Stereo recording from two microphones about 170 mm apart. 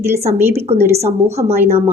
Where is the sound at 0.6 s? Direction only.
40° right (ahead or behind).